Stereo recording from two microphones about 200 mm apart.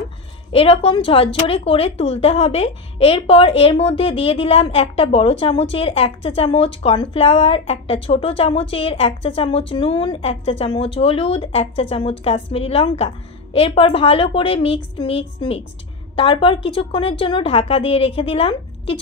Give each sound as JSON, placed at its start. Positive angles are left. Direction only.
{"t": 0.5, "sound": "speech", "side_deg": 30}